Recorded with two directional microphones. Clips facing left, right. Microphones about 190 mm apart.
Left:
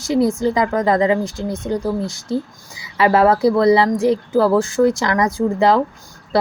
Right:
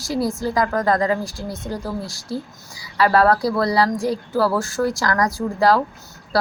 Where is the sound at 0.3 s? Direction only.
20° left (ahead or behind).